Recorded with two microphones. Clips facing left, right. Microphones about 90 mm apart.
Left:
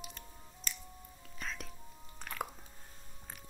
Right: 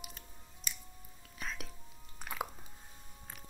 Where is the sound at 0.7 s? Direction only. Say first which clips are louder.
Left 1 dB; 15° right (ahead or behind).